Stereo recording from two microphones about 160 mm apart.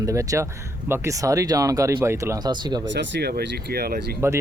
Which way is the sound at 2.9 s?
90° right.